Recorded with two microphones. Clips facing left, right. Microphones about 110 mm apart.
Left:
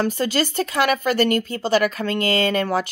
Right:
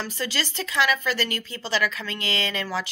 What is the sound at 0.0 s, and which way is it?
Speech, 50° left (ahead or behind).